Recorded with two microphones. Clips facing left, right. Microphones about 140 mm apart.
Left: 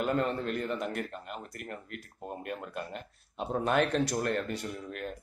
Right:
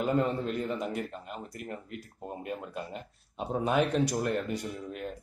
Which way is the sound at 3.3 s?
10° right (ahead or behind).